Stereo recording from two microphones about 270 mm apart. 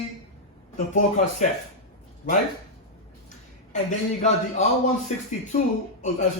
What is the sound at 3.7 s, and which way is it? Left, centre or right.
Speech, left.